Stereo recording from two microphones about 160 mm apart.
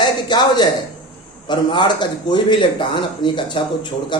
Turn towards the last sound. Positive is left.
turn(degrees=30)  # may be behind; listen again after turning